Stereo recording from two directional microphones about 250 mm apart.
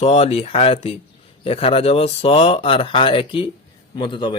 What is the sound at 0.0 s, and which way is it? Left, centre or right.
Speech, left.